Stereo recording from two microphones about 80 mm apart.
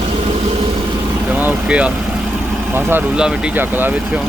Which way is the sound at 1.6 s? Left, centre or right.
Centre.